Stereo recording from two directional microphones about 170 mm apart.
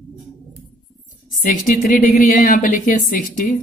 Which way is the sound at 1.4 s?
50° left (ahead or behind).